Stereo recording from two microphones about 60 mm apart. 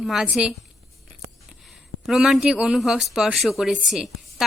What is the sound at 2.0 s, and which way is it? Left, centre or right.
A man's voice, centre.